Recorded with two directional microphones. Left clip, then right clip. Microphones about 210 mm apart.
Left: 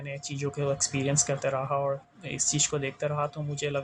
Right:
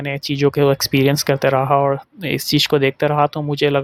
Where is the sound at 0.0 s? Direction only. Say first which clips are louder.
Right 16 dB; 50° right (ahead or behind).